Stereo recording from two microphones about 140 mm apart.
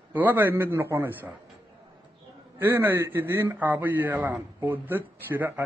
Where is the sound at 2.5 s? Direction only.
15° right (ahead or behind).